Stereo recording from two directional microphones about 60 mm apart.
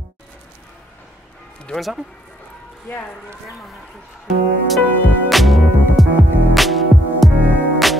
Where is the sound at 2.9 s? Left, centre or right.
Left.